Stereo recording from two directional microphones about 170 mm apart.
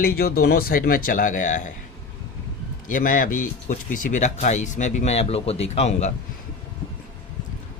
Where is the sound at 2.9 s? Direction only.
55° left (ahead or behind).